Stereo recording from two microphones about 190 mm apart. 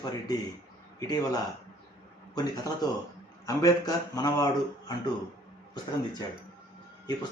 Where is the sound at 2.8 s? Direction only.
20° left (ahead or behind).